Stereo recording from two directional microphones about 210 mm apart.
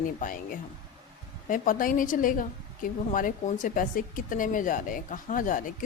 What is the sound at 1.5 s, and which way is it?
Speech, 40° left (ahead or behind).